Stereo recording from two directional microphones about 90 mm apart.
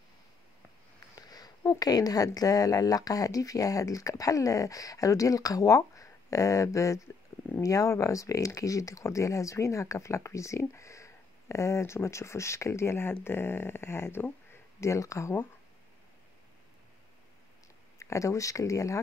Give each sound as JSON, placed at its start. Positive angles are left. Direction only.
{"t": 1.1, "sound": "speech", "side_deg": 45}
{"t": 17.9, "sound": "speech", "side_deg": 35}